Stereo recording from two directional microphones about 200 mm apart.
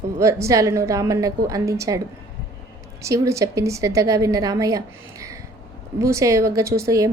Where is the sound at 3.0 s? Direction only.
15° right (ahead or behind).